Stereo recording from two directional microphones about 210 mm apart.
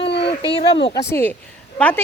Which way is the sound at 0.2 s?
25° left (ahead or behind).